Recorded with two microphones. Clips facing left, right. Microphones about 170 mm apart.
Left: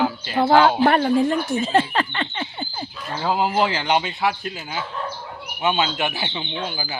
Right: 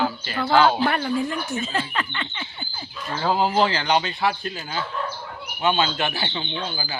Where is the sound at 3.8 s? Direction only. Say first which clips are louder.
Left 1 dB; 20° left (ahead or behind).